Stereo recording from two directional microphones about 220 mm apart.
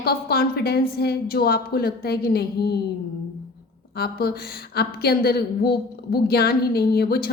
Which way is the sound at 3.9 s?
45° left (ahead or behind).